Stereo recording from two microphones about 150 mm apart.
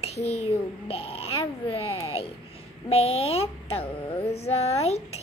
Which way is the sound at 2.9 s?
40° left (ahead or behind).